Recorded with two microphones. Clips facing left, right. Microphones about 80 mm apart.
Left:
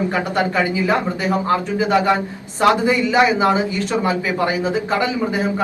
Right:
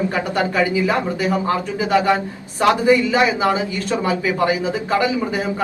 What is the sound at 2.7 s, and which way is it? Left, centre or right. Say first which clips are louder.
A man's voice: right 1 dB; left.